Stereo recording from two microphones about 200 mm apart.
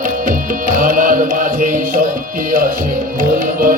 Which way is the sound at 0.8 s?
45° right (ahead or behind).